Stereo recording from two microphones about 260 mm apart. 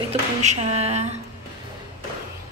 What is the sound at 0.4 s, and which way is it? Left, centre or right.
Speech, right.